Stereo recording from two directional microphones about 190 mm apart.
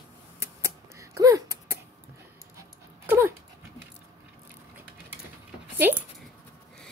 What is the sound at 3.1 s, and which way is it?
Dog, 10° right (ahead or behind).